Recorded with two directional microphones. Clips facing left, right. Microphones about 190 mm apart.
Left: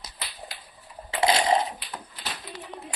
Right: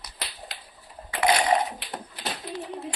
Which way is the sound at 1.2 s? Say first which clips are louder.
Even; 25° left (ahead or behind).